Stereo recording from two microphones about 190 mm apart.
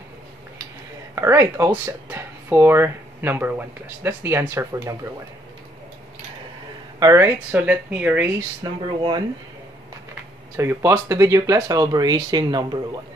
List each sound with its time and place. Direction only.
1.1 s speech: 15° right (ahead or behind)
7.0 s speech: 15° right (ahead or behind)
10.5 s speech: 15° right (ahead or behind)